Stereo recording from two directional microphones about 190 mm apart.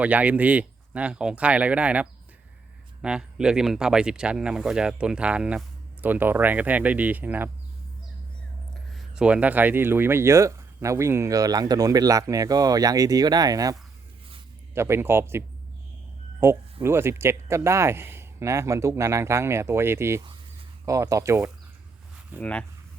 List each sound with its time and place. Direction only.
0.0 s speech: 10° right (ahead or behind)
8.9 s speech: centre (ahead or behind); by 13.7 s 20° right (ahead or behind)
14.8 s speech: 15° right (ahead or behind)
22.4 s speech: 5° left (ahead or behind)